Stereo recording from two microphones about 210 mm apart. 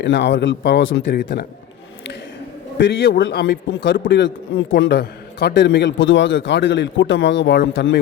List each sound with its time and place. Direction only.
0.0 s a man's voice: 55° left (ahead or behind)
2.7 s a man's voice: 55° left (ahead or behind)